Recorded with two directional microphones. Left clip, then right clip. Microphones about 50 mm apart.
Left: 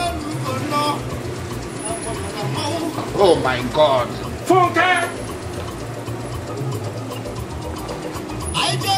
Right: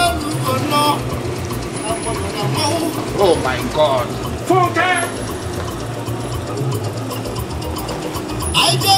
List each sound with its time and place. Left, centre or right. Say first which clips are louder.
0.0 s music: right 6 dB; right
2.5 s music: right 5 dB; right
3.2 s speech: even; centre
8.5 s a sound: right 6 dB; centre